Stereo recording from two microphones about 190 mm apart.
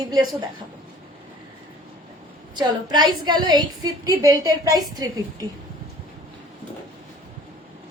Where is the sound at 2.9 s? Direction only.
20° right (ahead or behind).